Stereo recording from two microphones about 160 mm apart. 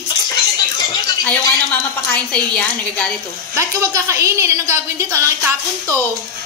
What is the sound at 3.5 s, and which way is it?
A woman's voice, 20° right (ahead or behind).